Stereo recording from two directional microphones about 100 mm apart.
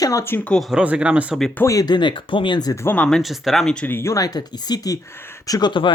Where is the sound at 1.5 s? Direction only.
30° left (ahead or behind); by 2.7 s 45° left (ahead or behind).